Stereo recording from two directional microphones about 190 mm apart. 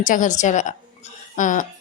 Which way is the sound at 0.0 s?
45° left (ahead or behind).